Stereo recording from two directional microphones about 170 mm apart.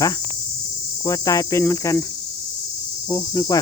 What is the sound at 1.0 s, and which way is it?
Cricket, 20° left (ahead or behind).